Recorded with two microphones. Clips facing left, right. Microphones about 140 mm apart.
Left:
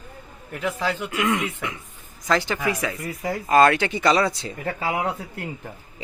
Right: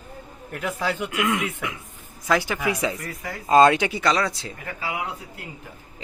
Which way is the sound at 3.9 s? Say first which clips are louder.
Left 3 dB; centre (ahead or behind).